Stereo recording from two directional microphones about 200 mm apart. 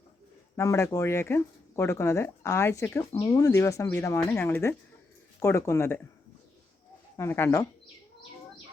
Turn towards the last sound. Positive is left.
turn(degrees=15)  # may be behind; listen again after turning